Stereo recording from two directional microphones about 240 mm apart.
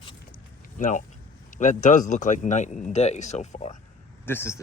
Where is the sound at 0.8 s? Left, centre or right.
Left.